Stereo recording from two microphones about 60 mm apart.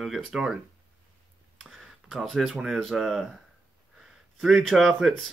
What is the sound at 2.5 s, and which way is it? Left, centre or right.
Speech, centre.